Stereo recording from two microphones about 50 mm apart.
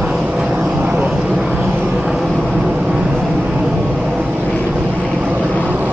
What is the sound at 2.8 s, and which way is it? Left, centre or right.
Vehicle, centre.